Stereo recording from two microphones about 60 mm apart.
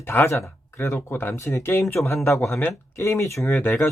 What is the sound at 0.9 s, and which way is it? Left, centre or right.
Speech, left.